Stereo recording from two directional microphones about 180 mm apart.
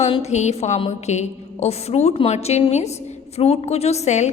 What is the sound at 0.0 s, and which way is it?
A woman's voice, 35° left (ahead or behind).